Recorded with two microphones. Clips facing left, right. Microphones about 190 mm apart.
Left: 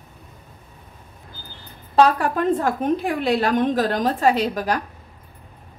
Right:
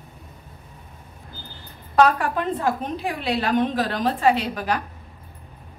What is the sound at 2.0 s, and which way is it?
A woman's voice, 40° left (ahead or behind).